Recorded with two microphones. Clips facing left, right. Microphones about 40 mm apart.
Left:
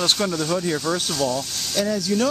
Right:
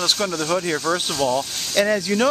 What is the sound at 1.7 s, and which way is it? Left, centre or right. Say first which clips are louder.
Speech: right 3 dB; right.